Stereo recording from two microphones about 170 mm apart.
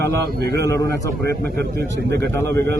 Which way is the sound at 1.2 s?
80° right.